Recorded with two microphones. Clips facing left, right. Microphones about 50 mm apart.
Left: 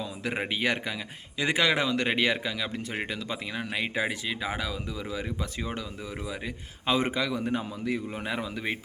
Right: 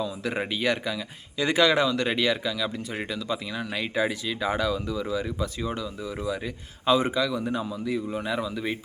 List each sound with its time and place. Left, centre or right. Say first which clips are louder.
0.0 s speech: right 3 dB; left
4.4 s speech: right 6 dB; centre; by 5.8 s left
6.2 s a man's voice: right 5 dB; left